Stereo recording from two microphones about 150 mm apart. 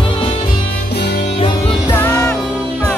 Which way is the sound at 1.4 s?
35° left (ahead or behind).